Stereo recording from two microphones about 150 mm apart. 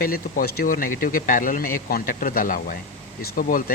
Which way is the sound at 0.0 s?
75° left (ahead or behind).